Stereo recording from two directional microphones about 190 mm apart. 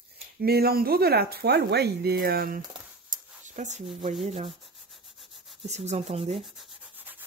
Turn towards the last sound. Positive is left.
turn(degrees=-35)  # may be behind; listen again after turning